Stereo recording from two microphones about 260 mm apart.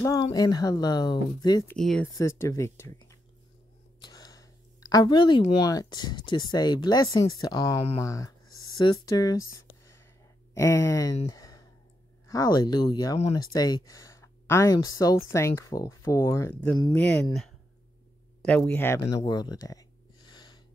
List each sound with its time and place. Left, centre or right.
0.0 s speech: centre
1.8 s speech: centre
10.5 s speech: centre
11.2 s a sound: centre
12.3 s speech: centre
20.2 s a sound: centre